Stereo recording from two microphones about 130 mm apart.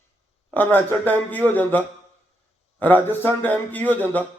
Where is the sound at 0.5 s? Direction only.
15° left (ahead or behind).